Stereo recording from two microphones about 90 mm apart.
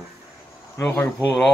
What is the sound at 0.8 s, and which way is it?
Speech, 20° left (ahead or behind).